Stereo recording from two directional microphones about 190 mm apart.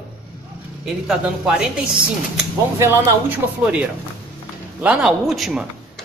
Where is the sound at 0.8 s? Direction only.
Centre (ahead or behind).